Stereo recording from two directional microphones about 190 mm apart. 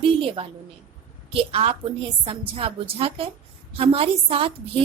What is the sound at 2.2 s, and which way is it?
A woman's voice, 30° right (ahead or behind).